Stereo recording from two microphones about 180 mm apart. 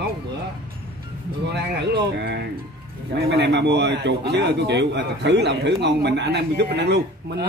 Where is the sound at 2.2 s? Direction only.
70° right (ahead or behind).